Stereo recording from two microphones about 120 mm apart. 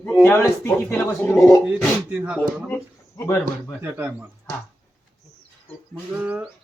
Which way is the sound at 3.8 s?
20° right (ahead or behind).